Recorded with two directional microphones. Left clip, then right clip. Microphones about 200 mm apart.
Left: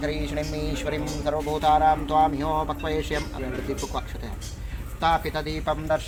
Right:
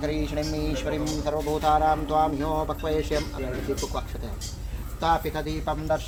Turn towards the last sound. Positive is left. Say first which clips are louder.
# left 2 dB
turn(degrees=10)  # may be behind; listen again after turning